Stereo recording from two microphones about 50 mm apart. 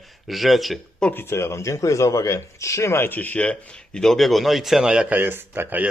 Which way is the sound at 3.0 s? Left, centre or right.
Left.